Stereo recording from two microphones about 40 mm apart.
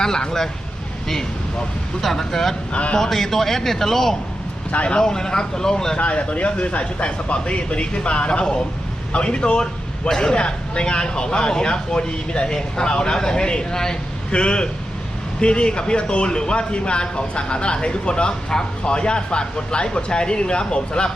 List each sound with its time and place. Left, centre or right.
0.0 s a man's voice: centre
2.0 s a man's voice: centre
4.7 s speech: left
4.9 s a man's voice: centre
6.0 s speech: left